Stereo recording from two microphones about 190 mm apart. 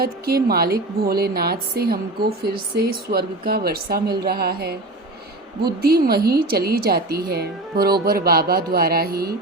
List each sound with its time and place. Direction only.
0.0 s a woman's voice: 55° right (ahead or behind)